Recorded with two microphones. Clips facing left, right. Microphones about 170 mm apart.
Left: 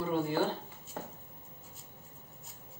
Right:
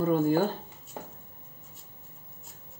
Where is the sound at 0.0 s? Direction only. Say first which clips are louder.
Right 8 dB; 45° right (ahead or behind).